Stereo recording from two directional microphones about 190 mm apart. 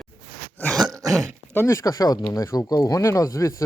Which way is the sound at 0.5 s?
5° left (ahead or behind).